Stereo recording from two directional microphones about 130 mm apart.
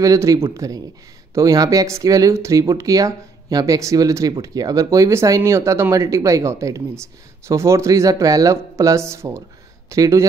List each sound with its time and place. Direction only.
0.0 s speech: 25° right (ahead or behind)